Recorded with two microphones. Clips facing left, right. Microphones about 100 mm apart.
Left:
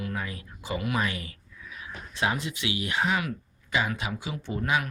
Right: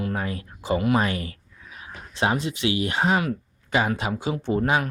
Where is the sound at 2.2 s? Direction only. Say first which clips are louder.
Right 5 dB; 30° right (ahead or behind).